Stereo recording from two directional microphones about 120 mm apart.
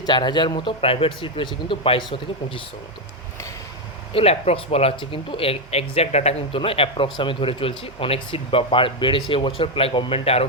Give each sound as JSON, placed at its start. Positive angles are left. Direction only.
{"t": 0.0, "sound": "speech", "side_deg": 40}
{"t": 4.1, "sound": "speech", "side_deg": 55}
{"t": 6.6, "sound": "speech", "side_deg": 50}